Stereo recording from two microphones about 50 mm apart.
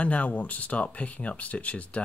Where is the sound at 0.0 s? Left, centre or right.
Left.